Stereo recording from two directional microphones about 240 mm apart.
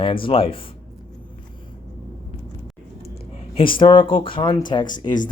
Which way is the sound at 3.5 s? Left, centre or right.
Left.